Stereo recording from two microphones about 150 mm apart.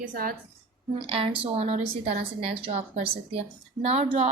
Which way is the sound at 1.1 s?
40° right (ahead or behind).